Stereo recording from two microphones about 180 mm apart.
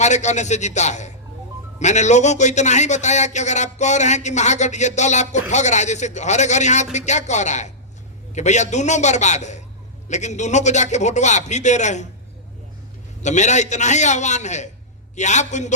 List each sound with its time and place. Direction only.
0.0 s speech: 40° left (ahead or behind)
13.2 s speech: 40° left (ahead or behind)